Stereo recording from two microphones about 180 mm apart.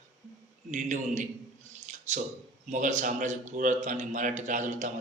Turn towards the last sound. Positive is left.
turn(degrees=-45)  # may be behind; listen again after turning